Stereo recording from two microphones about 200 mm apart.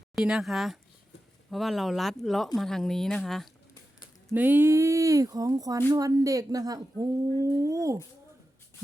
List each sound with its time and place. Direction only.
0.2 s speech: centre (ahead or behind)
4.3 s speech: 10° right (ahead or behind)